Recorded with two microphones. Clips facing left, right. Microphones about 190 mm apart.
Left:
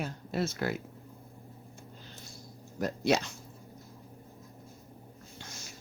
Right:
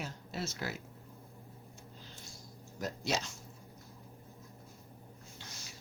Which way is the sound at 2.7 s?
60° left (ahead or behind).